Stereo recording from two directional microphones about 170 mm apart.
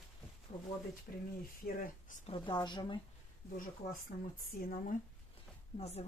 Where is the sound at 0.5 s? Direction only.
35° left (ahead or behind).